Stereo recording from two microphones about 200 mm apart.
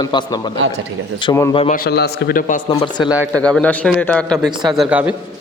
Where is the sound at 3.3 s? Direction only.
5° left (ahead or behind).